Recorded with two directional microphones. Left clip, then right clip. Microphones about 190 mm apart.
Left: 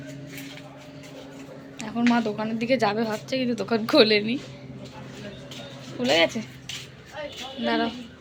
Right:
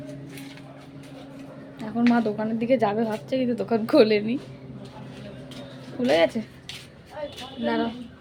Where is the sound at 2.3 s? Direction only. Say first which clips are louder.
Right 1 dB; 20° right (ahead or behind).